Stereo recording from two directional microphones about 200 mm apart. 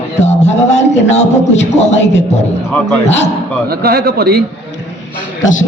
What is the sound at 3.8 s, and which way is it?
Speech, 50° right (ahead or behind).